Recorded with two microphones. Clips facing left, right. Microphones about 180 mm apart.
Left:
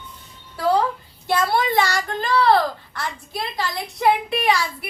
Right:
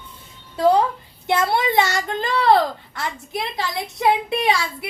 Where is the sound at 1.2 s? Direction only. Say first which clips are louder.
Right 1 dB; 20° right (ahead or behind).